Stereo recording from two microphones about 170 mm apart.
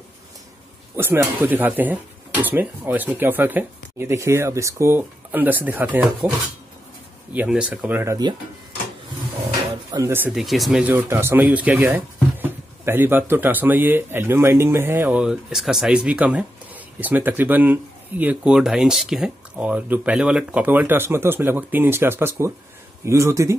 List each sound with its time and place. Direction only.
0.9 s speech: 15° right (ahead or behind)
7.3 s speech: 5° right (ahead or behind)
9.8 s speech: 15° right (ahead or behind)